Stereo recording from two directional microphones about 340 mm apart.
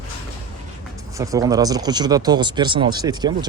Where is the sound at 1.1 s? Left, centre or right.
Centre.